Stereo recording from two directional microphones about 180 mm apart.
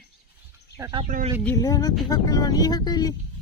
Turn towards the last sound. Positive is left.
turn(degrees=20)  # may be behind; listen again after turning